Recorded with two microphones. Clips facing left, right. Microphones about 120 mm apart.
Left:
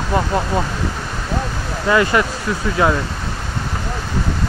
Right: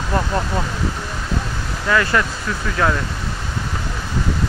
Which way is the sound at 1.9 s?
20° left (ahead or behind).